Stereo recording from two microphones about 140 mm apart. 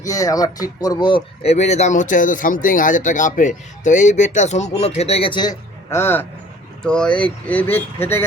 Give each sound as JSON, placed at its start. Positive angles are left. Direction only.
{"t": 0.0, "sound": "speech", "side_deg": 25}
{"t": 5.9, "sound": "speech", "side_deg": 15}